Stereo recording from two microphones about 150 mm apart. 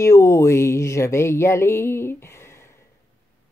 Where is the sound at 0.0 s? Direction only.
20° left (ahead or behind).